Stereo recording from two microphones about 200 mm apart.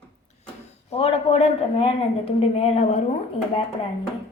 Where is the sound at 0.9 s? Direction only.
30° left (ahead or behind).